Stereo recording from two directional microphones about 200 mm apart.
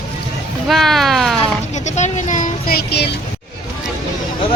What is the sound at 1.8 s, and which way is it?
Speech, 35° left (ahead or behind).